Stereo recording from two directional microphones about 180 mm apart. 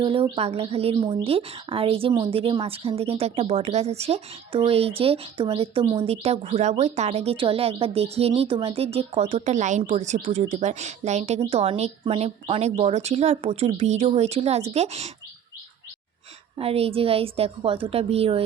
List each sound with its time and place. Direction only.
0.0 s speech: 30° right (ahead or behind)
16.6 s speech: 35° right (ahead or behind)